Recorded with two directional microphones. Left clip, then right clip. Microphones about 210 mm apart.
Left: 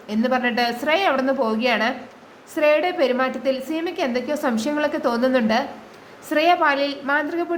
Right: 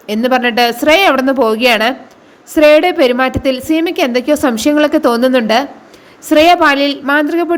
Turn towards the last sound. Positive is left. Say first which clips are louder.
# right 9 dB
turn(degrees=-35)  # may be behind; listen again after turning